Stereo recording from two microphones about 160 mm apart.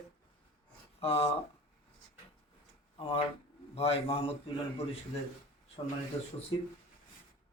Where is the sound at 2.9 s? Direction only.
35° left (ahead or behind).